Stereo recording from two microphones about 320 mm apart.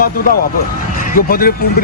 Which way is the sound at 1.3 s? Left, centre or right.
Left.